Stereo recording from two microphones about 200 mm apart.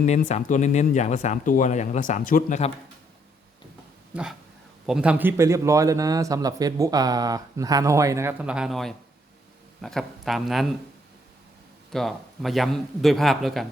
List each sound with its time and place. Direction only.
0.0 s speech: 35° left (ahead or behind)
4.1 s a man's voice: 5° right (ahead or behind)
11.9 s a man's voice: centre (ahead or behind)